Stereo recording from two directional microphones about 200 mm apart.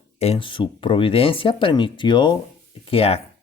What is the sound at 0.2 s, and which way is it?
Speech, 30° left (ahead or behind).